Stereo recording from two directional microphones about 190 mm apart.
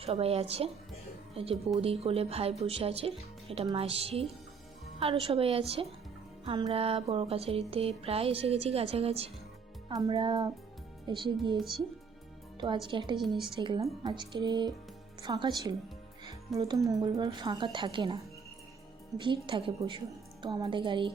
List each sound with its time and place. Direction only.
0.0 s music: 30° right (ahead or behind)
1.8 s music: 30° right (ahead or behind)
9.9 s a woman's voice: 25° right (ahead or behind)
12.5 s a woman's voice: 25° right (ahead or behind)